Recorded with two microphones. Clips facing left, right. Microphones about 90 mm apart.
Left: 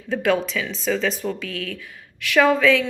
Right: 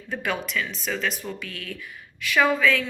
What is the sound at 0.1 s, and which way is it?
A woman's voice, 90° left.